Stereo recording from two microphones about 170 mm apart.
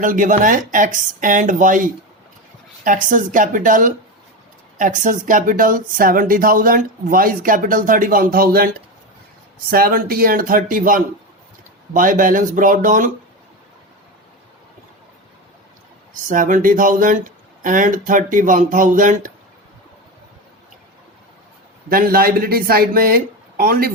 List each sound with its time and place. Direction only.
0.0 s speech: 50° right (ahead or behind)
16.3 s speech: 50° right (ahead or behind)
21.8 s speech: 55° right (ahead or behind)